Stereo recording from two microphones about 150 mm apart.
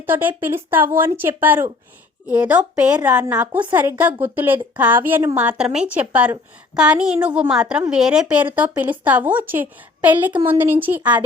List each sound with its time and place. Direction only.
0.0 s a woman's voice: 15° right (ahead or behind)